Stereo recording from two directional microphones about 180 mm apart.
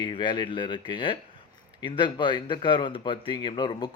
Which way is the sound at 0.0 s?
25° left (ahead or behind).